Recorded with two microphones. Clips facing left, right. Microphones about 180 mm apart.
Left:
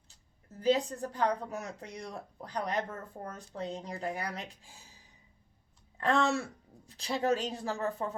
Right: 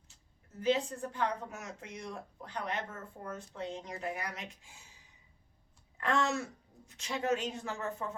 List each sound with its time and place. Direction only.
0.6 s speech: 40° left (ahead or behind)